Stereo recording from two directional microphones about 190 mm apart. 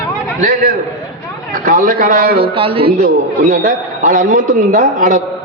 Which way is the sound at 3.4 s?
45° right (ahead or behind).